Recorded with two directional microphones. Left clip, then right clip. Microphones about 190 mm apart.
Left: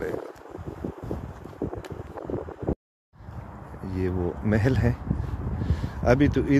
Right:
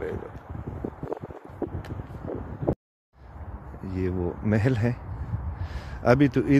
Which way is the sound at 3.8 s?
10° right (ahead or behind).